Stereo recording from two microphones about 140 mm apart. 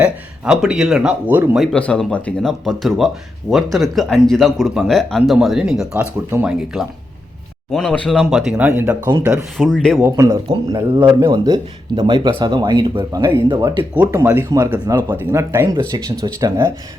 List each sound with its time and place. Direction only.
0.0 s speech: 5° right (ahead or behind)
1.7 s speech: 10° left (ahead or behind); by 9.0 s 15° right (ahead or behind)
9.0 s speech: 30° right (ahead or behind)
9.3 s speech: 5° left (ahead or behind)
10.0 s speech: 20° right (ahead or behind)
14.0 s speech: 10° right (ahead or behind); by 15.1 s 30° right (ahead or behind)
15.1 s speech: 15° right (ahead or behind)
15.7 s speech: 30° right (ahead or behind)